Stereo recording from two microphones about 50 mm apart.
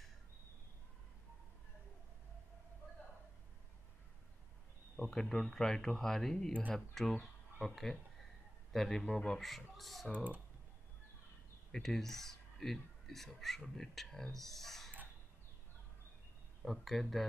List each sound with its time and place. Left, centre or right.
5.0 s speech: centre
9.8 s speech: centre
10.1 s speech: right
11.7 s speech: centre
16.6 s speech: centre